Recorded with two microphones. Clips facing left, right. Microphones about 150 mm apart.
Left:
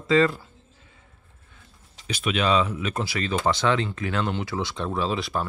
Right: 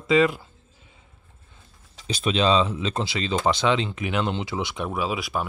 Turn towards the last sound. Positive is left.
turn(degrees=-10)  # may be behind; listen again after turning